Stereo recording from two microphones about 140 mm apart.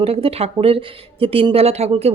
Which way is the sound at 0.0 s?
45° right (ahead or behind).